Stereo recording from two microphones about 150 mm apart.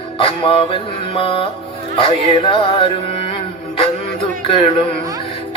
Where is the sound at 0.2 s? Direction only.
35° left (ahead or behind).